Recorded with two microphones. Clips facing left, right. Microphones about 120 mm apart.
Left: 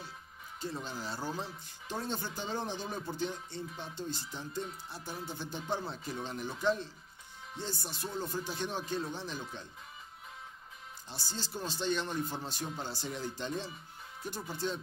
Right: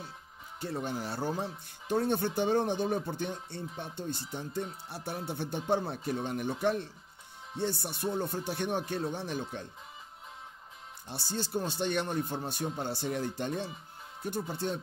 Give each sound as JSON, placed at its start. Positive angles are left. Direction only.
{"t": 0.6, "sound": "speech", "side_deg": -60}
{"t": 11.1, "sound": "speech", "side_deg": -60}